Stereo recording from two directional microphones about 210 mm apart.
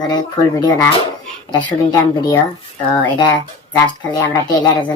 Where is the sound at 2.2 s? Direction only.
15° left (ahead or behind).